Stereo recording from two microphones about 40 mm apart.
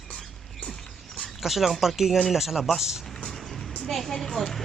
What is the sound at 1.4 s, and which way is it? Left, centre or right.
Speech, centre.